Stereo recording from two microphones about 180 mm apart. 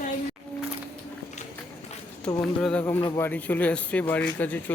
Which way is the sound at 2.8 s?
15° left (ahead or behind).